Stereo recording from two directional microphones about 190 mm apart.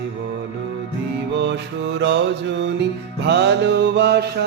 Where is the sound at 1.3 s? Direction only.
65° right (ahead or behind).